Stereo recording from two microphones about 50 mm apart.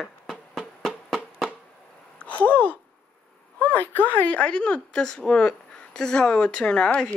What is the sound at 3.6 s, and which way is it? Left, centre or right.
A woman's voice, left.